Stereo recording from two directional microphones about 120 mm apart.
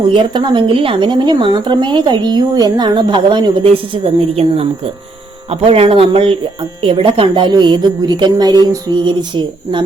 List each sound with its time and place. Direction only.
0.1 s a woman's voice: 40° right (ahead or behind)